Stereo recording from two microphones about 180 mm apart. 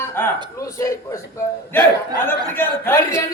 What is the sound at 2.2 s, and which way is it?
Speech, 10° left (ahead or behind).